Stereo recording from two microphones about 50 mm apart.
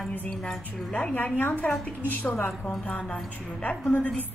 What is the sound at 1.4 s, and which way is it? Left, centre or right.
Music, left.